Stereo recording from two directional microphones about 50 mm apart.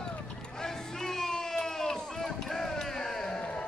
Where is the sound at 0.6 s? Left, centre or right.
Centre.